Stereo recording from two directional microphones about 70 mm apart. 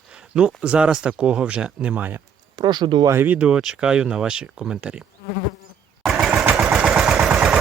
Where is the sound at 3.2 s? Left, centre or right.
Right.